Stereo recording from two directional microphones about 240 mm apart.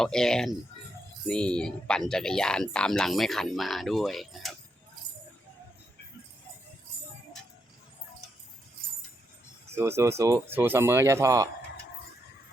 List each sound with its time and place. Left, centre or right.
0.0 s speech: centre
9.7 s speech: centre